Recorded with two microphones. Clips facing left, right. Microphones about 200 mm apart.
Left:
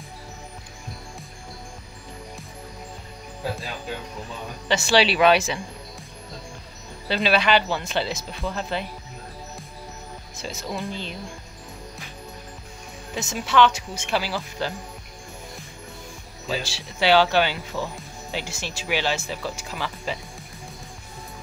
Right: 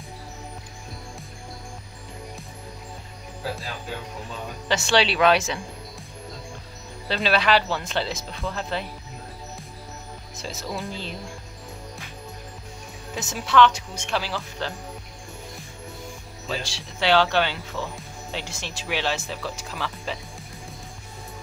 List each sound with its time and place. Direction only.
4.6 s speech: centre (ahead or behind)
7.1 s speech: centre (ahead or behind)
10.3 s speech: centre (ahead or behind)
13.1 s speech: centre (ahead or behind)
16.4 s speech: 5° left (ahead or behind)